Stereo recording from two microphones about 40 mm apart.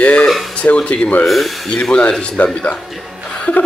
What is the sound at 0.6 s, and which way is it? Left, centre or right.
Speech, left.